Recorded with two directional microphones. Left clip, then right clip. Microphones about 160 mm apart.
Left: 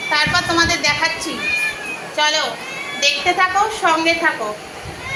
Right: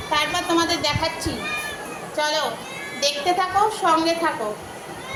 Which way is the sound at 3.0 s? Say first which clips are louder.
Left 5 dB; 5° right (ahead or behind).